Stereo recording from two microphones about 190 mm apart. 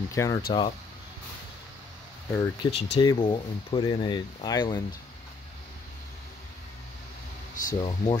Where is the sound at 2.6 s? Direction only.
30° left (ahead or behind).